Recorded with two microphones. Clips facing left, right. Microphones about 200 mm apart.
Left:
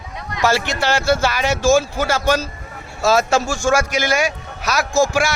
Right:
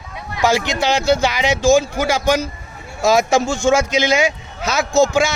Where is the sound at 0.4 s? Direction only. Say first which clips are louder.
Right 2 dB; 15° right (ahead or behind).